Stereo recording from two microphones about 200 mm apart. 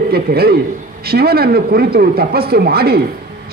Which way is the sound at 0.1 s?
50° right (ahead or behind).